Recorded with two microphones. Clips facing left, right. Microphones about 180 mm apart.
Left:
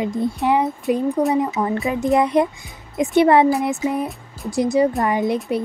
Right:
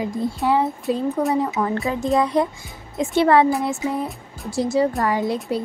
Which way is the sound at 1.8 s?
20° left (ahead or behind).